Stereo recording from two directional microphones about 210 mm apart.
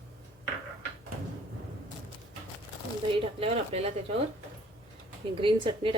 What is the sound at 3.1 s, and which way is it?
Speech, 25° right (ahead or behind).